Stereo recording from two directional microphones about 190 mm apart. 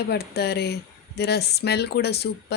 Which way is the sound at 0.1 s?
60° left (ahead or behind).